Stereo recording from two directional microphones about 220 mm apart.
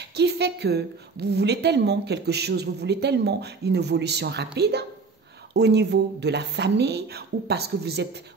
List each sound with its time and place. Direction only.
0.1 s a woman's voice: 50° right (ahead or behind)